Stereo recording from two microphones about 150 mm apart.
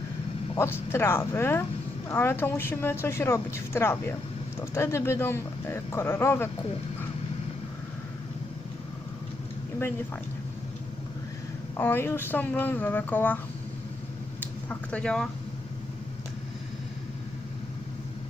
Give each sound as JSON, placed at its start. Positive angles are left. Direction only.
{"t": 0.5, "sound": "a woman's voice", "side_deg": 15}
{"t": 11.8, "sound": "a woman's voice", "side_deg": 15}
{"t": 14.7, "sound": "speech", "side_deg": 10}